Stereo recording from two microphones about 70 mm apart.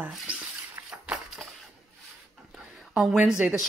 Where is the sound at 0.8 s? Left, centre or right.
Right.